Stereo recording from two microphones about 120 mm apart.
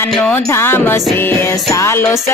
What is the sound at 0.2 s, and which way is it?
Music, 15° left (ahead or behind).